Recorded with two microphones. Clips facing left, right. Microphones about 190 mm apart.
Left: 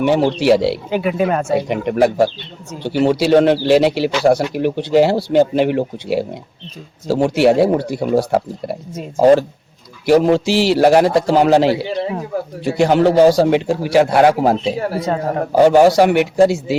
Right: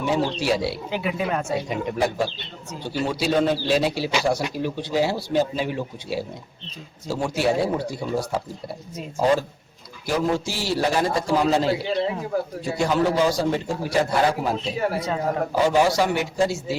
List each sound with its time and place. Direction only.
0.0 s speech: 75° left (ahead or behind)
2.8 s a man's voice: 75° left (ahead or behind)
4.2 s speech: 60° left (ahead or behind)
4.5 s a man's voice: 70° left (ahead or behind)